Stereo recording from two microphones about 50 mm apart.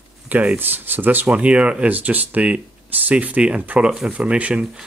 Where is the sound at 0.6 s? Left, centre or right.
Right.